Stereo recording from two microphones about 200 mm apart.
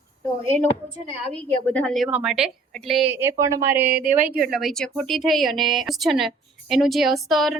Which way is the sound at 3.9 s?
40° right (ahead or behind).